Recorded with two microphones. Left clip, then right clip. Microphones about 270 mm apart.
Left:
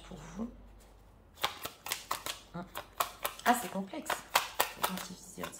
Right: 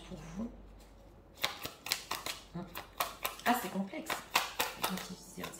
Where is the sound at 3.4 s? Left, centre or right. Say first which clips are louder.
Left 3 dB; centre.